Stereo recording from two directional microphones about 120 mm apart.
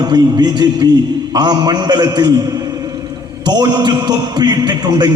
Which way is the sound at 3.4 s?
35° right (ahead or behind).